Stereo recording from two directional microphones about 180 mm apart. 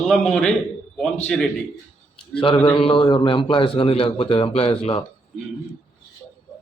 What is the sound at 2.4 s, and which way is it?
A man's voice, 30° left (ahead or behind).